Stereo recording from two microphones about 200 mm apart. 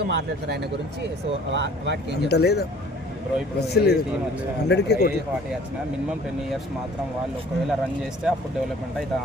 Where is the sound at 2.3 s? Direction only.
55° left (ahead or behind).